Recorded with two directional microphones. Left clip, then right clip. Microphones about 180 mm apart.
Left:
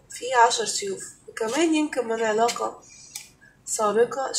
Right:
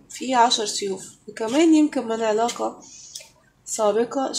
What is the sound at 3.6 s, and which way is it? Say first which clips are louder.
Speech: right 1 dB; 50° right (ahead or behind).